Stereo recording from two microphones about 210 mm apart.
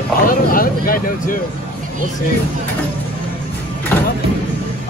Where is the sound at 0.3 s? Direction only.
40° left (ahead or behind).